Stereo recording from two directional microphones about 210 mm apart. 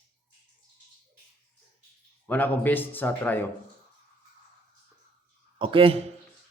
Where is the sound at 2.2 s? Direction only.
10° left (ahead or behind).